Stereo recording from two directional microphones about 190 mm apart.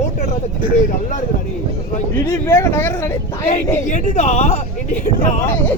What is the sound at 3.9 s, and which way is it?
Speech, 40° left (ahead or behind).